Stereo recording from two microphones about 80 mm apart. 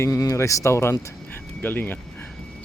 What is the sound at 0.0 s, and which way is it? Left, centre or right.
Speech, left.